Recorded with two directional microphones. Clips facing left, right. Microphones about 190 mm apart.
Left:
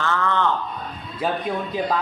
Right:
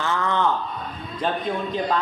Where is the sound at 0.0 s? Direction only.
15° right (ahead or behind).